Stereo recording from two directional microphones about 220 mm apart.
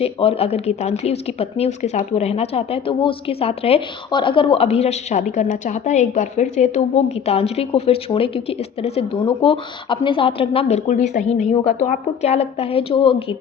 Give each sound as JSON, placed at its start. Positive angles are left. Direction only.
{"t": 0.0, "sound": "speech", "side_deg": 25}